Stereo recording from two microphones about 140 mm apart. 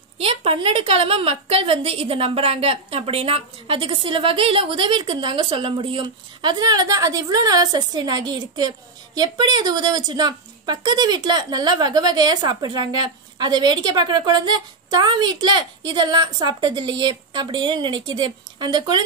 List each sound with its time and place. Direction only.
0.2 s a woman's voice: 40° right (ahead or behind)